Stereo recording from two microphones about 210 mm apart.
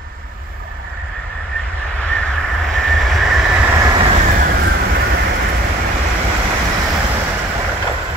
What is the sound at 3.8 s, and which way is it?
Vehicle, 20° right (ahead or behind).